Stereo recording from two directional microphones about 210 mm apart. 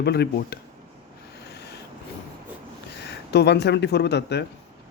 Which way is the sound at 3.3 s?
55° left (ahead or behind).